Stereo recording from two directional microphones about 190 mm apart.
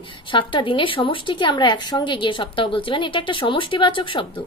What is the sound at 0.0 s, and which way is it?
Speech, 25° left (ahead or behind).